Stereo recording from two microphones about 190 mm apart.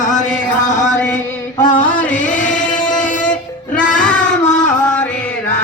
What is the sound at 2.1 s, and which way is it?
Singing, 40° left (ahead or behind).